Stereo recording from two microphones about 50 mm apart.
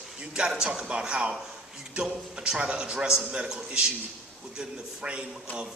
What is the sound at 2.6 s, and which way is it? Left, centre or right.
Speech, right.